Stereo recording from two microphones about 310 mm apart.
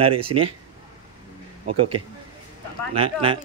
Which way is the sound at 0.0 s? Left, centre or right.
Centre.